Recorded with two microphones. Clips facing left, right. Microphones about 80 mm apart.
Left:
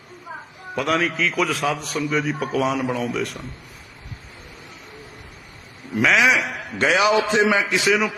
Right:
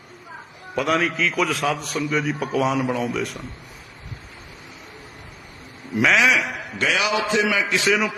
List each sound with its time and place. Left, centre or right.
0.8 s a man's voice: centre
6.0 s a man's voice: centre
6.7 s a man's voice: left
7.7 s a man's voice: centre